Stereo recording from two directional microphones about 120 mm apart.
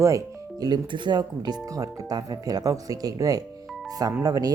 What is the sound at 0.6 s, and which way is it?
Speech, 40° right (ahead or behind).